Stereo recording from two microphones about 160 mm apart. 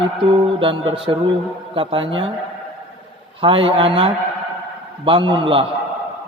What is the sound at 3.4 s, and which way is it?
A man's voice, 35° right (ahead or behind).